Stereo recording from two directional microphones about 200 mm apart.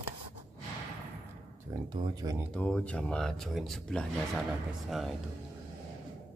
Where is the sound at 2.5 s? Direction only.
5° left (ahead or behind).